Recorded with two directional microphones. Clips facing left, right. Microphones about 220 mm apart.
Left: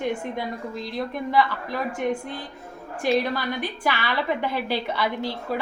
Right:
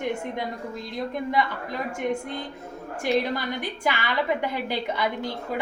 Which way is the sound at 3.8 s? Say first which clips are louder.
Even; 15° right (ahead or behind).